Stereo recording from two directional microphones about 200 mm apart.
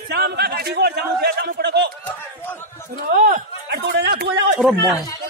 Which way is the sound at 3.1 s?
40° right (ahead or behind).